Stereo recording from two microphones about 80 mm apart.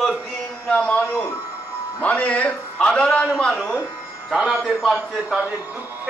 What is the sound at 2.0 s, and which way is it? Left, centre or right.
A man's voice, centre.